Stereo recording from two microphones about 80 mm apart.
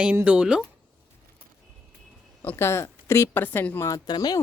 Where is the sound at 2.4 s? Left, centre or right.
Left.